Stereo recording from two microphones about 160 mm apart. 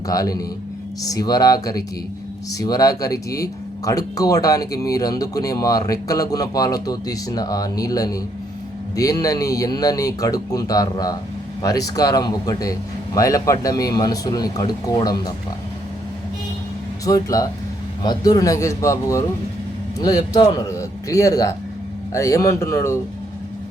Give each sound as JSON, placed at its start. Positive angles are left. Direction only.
{"t": 0.1, "sound": "speech", "side_deg": 20}
{"t": 17.1, "sound": "speech", "side_deg": 20}